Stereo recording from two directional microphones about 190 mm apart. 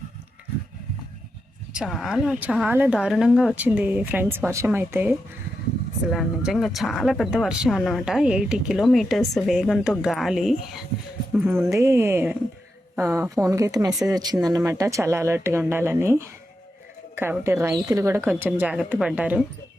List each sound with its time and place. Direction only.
1.7 s a woman's voice: centre (ahead or behind)
11.6 s a woman's voice: 15° right (ahead or behind)